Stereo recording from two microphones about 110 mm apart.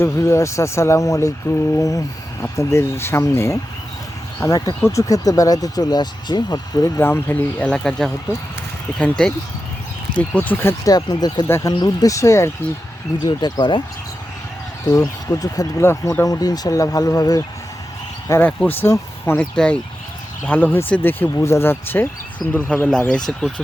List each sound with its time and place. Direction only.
0.0 s speech: 25° left (ahead or behind)
7.0 s speech: 20° left (ahead or behind)
7.7 s speech: 5° left (ahead or behind)
10.8 s speech: 35° left (ahead or behind)
11.4 s speech: 25° left (ahead or behind)
11.7 s speech: 40° left (ahead or behind)
13.2 s speech: 40° left (ahead or behind)
14.8 s speech: 35° left (ahead or behind)
15.8 s speech: 25° left (ahead or behind)
18.3 s speech: 15° left (ahead or behind)
19.5 s speech: 10° left (ahead or behind)
22.7 s speech: 10° left (ahead or behind)